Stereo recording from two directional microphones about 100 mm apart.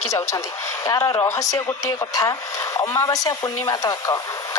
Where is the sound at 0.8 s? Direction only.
35° left (ahead or behind).